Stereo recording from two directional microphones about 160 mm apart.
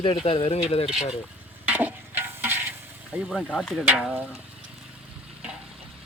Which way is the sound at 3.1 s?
10° right (ahead or behind).